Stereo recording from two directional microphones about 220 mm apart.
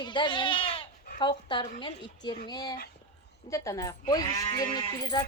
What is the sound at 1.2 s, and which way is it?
A woman's voice, 20° left (ahead or behind).